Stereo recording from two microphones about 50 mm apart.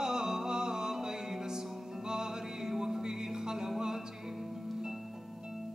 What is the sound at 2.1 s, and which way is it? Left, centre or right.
Music, centre.